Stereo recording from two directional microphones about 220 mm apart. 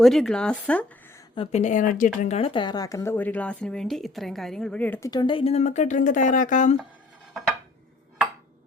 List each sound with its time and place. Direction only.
0.0 s speech: centre (ahead or behind)
1.4 s a woman's voice: 30° left (ahead or behind)